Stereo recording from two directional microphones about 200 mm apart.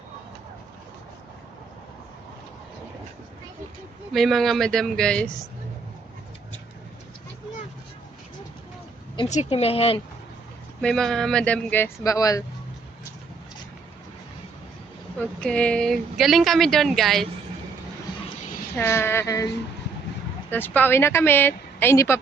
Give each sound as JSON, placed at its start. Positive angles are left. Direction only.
{"t": 4.1, "sound": "speech", "side_deg": 0}
{"t": 9.3, "sound": "speech", "side_deg": 35}
{"t": 10.8, "sound": "speech", "side_deg": 0}
{"t": 15.4, "sound": "speech", "side_deg": 5}
{"t": 18.7, "sound": "speech", "side_deg": 10}
{"t": 20.5, "sound": "speech", "side_deg": 10}